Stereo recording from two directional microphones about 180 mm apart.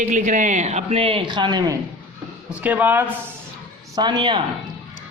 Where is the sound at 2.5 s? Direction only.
10° right (ahead or behind).